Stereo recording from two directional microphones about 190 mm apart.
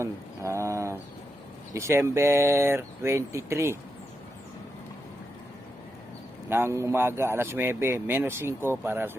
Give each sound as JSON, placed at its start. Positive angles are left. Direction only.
{"t": 0.0, "sound": "bird", "side_deg": -15}
{"t": 1.7, "sound": "speech", "side_deg": -15}
{"t": 6.5, "sound": "speech", "side_deg": -15}